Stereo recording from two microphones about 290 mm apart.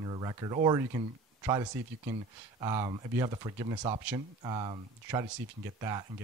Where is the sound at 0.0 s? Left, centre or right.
Centre.